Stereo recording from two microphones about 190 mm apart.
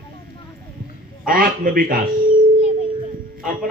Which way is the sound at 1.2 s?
50° right (ahead or behind).